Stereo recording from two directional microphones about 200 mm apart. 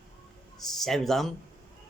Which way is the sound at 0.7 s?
Centre (ahead or behind).